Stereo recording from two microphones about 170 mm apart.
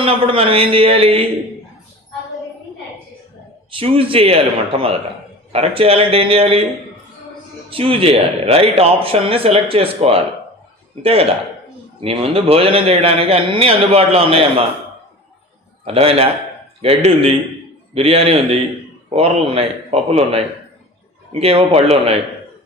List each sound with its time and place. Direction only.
0.0 s speech: 30° right (ahead or behind)
3.7 s speech: 30° right (ahead or behind)
7.7 s speech: 35° right (ahead or behind)
15.8 s speech: 35° right (ahead or behind)